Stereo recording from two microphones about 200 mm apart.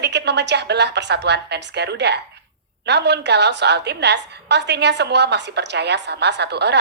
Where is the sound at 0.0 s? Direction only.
60° right (ahead or behind).